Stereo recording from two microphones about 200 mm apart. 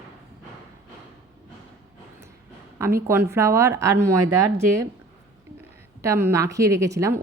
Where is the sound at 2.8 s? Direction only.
15° right (ahead or behind).